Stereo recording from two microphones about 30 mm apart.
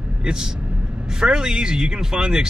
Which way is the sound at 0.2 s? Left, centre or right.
Right.